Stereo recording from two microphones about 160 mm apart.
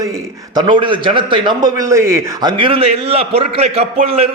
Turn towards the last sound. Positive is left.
turn(degrees=-40)  # may be behind; listen again after turning